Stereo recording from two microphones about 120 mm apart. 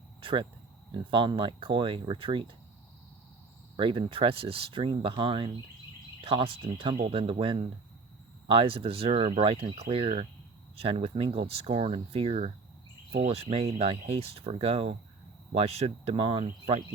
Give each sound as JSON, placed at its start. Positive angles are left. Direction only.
{"t": 0.2, "sound": "a sound", "side_deg": -45}
{"t": 0.9, "sound": "speech", "side_deg": -45}
{"t": 3.8, "sound": "speech", "side_deg": -45}